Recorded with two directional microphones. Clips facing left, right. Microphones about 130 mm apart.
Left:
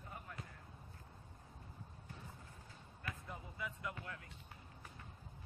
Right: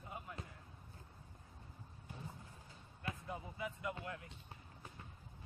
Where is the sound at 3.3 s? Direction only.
20° right (ahead or behind).